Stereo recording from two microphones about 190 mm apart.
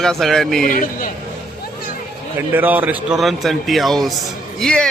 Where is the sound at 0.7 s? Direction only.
45° left (ahead or behind).